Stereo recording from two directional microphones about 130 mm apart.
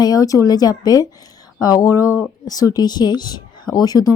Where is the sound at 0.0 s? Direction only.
30° left (ahead or behind).